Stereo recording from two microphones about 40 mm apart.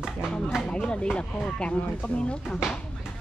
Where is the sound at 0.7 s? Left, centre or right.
Left.